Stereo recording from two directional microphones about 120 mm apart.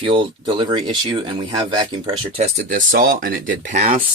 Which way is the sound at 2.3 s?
75° right (ahead or behind).